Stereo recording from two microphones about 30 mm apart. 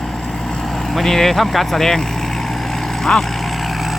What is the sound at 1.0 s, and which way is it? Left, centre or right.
Speech, centre.